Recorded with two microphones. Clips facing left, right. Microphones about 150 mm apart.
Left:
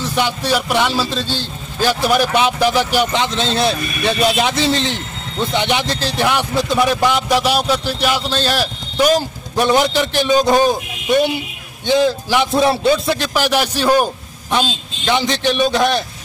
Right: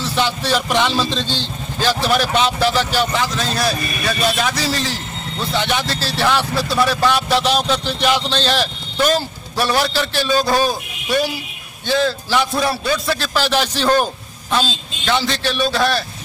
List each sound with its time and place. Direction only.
0.0 s speech: 15° left (ahead or behind)